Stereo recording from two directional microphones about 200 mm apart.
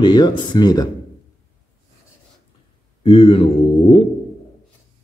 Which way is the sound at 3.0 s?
25° left (ahead or behind).